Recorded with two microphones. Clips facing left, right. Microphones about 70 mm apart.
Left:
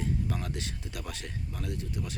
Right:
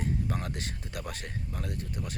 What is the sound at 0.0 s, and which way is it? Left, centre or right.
Speech, right.